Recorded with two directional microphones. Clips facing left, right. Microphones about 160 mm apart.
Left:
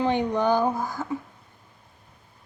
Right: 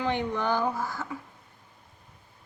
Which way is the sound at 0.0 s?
15° left (ahead or behind).